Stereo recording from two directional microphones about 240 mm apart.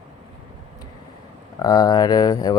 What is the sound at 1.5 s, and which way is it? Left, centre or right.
Speech, centre.